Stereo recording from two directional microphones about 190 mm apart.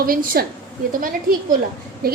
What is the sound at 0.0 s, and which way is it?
Speech, 50° right (ahead or behind).